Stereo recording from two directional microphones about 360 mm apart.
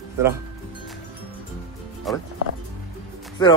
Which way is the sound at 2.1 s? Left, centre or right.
Centre.